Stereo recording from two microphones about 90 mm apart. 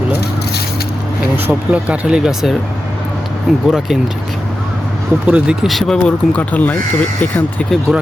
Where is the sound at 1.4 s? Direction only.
15° right (ahead or behind).